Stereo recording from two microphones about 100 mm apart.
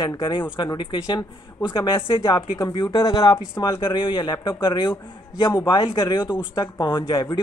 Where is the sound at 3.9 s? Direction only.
55° left (ahead or behind).